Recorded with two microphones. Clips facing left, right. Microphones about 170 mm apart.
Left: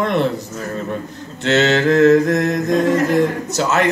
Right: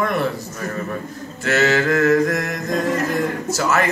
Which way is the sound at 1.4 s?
20° left (ahead or behind).